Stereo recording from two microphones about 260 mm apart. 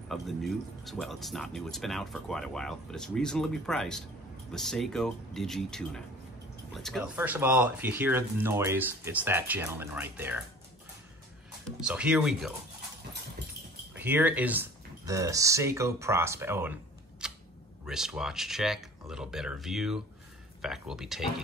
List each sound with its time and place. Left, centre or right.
0.1 s speech: centre
11.8 s speech: centre
13.4 s dog: right
13.9 s speech: centre
17.2 s a sound: centre
17.8 s speech: centre